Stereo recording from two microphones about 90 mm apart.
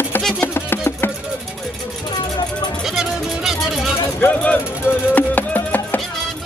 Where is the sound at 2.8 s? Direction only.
5° right (ahead or behind).